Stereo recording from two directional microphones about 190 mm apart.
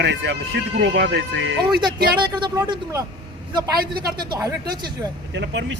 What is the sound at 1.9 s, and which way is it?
Speech, 55° right (ahead or behind).